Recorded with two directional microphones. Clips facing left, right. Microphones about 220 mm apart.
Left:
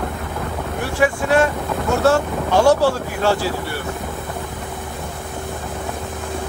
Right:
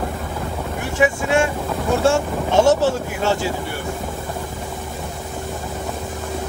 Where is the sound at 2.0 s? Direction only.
25° right (ahead or behind).